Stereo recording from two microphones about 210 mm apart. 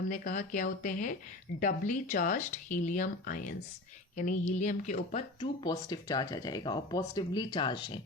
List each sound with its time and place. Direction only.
0.1 s speech: 35° left (ahead or behind)
5.4 s speech: 20° left (ahead or behind)